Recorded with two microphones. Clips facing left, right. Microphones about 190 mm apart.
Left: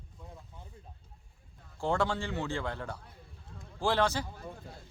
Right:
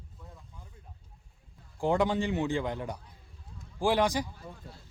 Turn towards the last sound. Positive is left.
turn(degrees=-15)  # may be behind; listen again after turning